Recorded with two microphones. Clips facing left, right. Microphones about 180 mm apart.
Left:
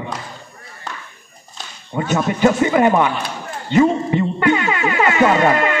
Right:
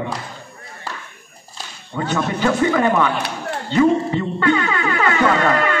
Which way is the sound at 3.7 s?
15° left (ahead or behind).